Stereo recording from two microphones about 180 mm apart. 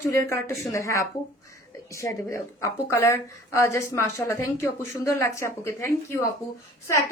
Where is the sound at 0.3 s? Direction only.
15° left (ahead or behind).